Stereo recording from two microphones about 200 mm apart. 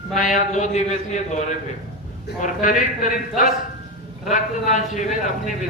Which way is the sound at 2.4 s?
40° left (ahead or behind).